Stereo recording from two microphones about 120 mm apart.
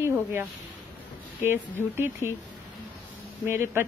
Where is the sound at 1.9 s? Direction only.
20° right (ahead or behind).